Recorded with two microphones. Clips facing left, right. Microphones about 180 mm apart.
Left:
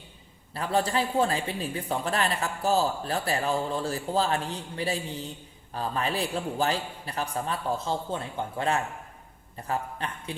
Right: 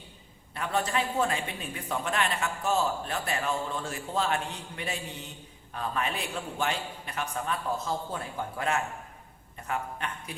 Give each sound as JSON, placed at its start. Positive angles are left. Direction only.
{"t": 0.5, "sound": "a man's voice", "side_deg": 30}